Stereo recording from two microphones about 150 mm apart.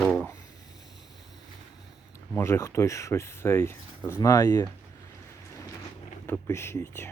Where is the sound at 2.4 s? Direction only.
15° left (ahead or behind).